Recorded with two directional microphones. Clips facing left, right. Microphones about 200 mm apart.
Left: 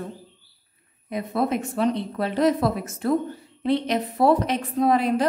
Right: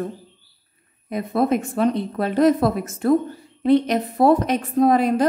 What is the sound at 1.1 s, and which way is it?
A woman's voice, 50° right (ahead or behind).